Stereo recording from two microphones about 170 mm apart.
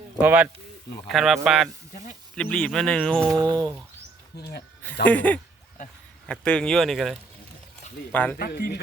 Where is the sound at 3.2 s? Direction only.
20° right (ahead or behind).